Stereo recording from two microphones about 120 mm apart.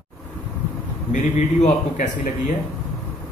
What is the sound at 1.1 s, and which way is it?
Speech, 90° left.